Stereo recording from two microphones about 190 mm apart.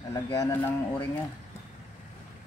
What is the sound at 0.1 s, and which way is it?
Speech, 15° left (ahead or behind).